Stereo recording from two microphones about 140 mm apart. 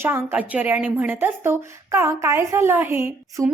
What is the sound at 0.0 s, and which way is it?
A woman's voice, 15° right (ahead or behind).